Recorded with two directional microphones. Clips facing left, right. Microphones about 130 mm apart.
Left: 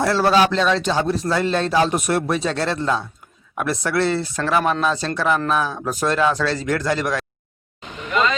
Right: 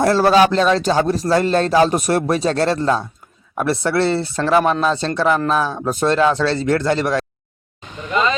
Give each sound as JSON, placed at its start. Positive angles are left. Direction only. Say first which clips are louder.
{"t": 0.0, "sound": "speech", "louder": "right 4 dB", "side_deg": -45}